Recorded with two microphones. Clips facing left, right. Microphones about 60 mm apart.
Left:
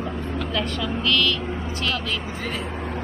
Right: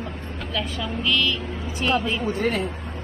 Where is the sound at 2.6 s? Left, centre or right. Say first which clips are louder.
Left 1 dB; left.